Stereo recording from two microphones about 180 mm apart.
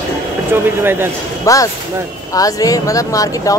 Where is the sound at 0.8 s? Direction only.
10° right (ahead or behind).